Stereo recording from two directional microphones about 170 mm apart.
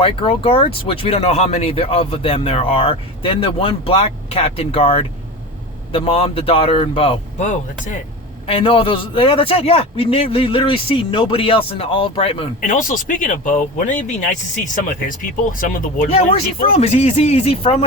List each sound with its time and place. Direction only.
0.0 s speech: 30° left (ahead or behind)
8.4 s speech: 35° left (ahead or behind)
12.6 s speech: 50° left (ahead or behind)
16.0 s speech: 35° left (ahead or behind)